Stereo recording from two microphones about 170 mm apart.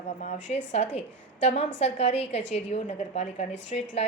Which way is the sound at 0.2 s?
45° left (ahead or behind).